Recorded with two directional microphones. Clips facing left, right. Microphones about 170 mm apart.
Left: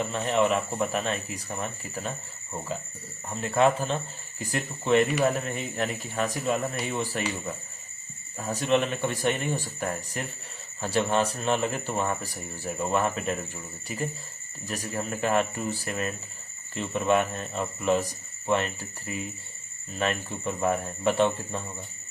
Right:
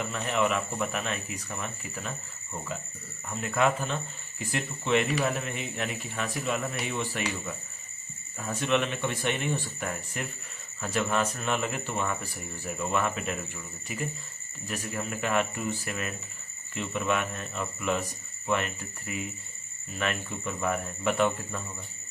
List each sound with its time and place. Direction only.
0.0 s speech: 30° left (ahead or behind)
3.2 s speech: 35° left (ahead or behind)